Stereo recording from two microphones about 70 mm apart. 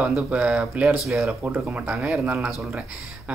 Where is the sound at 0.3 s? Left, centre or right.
Centre.